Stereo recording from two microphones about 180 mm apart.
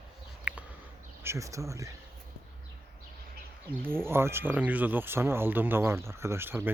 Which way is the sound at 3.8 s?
15° right (ahead or behind).